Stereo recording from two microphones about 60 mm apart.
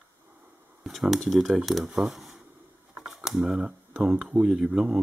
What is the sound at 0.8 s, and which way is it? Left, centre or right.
Speech, centre.